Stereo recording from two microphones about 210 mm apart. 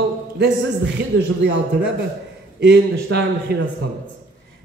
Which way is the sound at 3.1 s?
55° right (ahead or behind).